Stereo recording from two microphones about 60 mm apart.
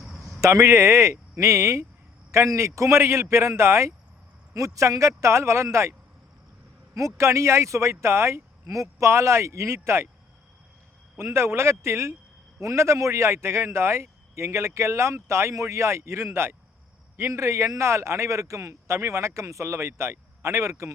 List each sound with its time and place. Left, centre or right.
0.0 s a sound: centre
0.4 s a man's voice: right
4.5 s speech: right
6.9 s a man's voice: right
11.2 s a man's voice: right